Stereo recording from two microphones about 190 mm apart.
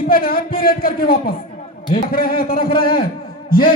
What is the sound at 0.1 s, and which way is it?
Speech, 50° left (ahead or behind).